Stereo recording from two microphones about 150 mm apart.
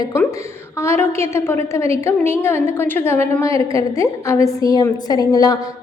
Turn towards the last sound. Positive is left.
turn(degrees=25)  # may be behind; listen again after turning